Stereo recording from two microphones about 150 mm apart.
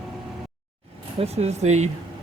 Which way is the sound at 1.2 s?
45° right (ahead or behind).